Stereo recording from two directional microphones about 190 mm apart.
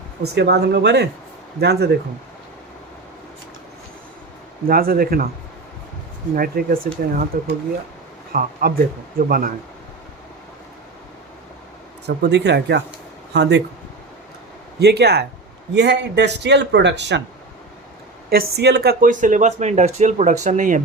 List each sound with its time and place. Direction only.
0.3 s a man's voice: 60° right (ahead or behind)
4.7 s speech: 50° right (ahead or behind)
6.3 s speech: 50° right (ahead or behind)
12.0 s a man's voice: 60° right (ahead or behind)
14.8 s a man's voice: 60° right (ahead or behind)
18.3 s speech: 55° right (ahead or behind)